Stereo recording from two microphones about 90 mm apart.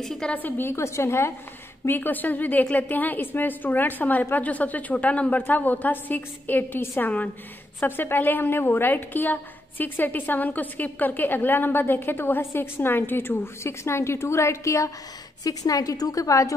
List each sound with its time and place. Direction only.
0.0 s a woman's voice: 5° left (ahead or behind)
0.3 s a woman's voice: 20° left (ahead or behind); by 16.5 s 35° left (ahead or behind)